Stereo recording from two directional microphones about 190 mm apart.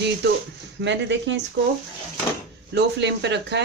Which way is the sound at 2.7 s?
65° right (ahead or behind).